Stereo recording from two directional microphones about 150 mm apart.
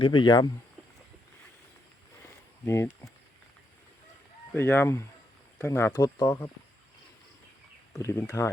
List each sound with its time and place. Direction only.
0.0 s speech: 35° left (ahead or behind)
2.6 s speech: 20° left (ahead or behind)
4.5 s speech: 15° left (ahead or behind)
7.9 s speech: 20° left (ahead or behind)